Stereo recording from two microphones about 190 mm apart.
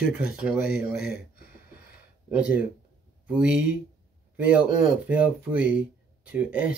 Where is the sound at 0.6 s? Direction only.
50° left (ahead or behind).